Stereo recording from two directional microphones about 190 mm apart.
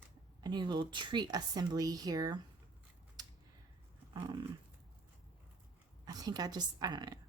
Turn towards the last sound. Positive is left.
turn(degrees=-20)  # may be behind; listen again after turning